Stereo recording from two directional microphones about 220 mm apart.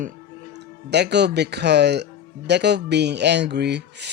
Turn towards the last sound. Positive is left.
turn(degrees=-50)  # may be behind; listen again after turning